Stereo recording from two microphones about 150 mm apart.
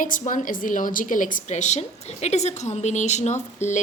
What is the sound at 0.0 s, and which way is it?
A woman's voice, 60° left (ahead or behind).